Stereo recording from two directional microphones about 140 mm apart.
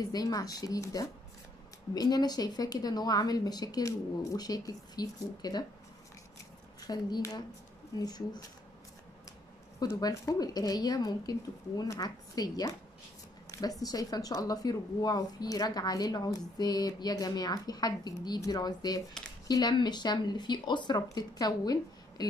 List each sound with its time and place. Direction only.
0.0 s speech: 25° left (ahead or behind)
6.9 s speech: 25° left (ahead or behind)
9.8 s speech: 25° left (ahead or behind)